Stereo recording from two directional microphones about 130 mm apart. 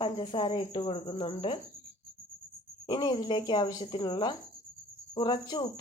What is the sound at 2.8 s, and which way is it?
Speech, 35° left (ahead or behind).